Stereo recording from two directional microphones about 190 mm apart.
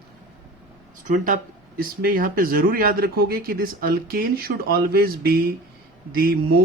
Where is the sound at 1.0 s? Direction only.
45° right (ahead or behind).